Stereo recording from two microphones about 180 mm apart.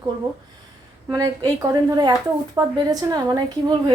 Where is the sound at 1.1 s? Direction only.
20° right (ahead or behind).